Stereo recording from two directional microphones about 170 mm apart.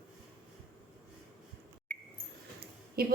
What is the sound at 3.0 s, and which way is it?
Speech, 65° right (ahead or behind).